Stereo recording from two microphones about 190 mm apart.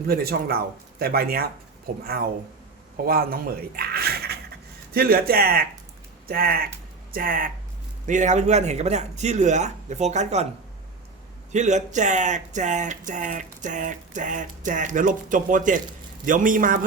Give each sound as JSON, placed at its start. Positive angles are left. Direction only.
{"t": 0.1, "sound": "speech", "side_deg": -55}
{"t": 11.5, "sound": "speech", "side_deg": -40}